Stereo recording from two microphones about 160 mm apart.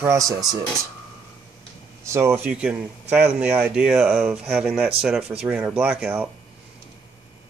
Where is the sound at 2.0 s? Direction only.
15° right (ahead or behind).